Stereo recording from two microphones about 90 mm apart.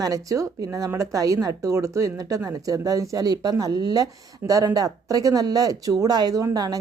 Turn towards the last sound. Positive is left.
turn(degrees=-45)  # may be behind; listen again after turning